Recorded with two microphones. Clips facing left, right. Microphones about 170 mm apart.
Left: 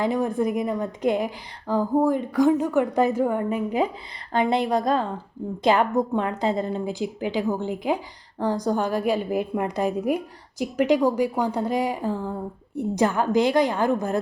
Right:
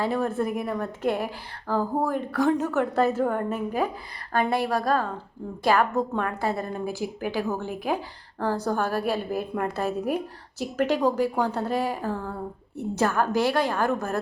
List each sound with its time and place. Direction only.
0.0 s a woman's voice: 15° left (ahead or behind)